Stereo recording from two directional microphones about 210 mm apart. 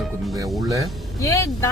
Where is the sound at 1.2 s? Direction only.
15° left (ahead or behind).